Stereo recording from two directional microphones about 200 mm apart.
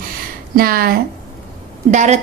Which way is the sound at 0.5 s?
45° right (ahead or behind).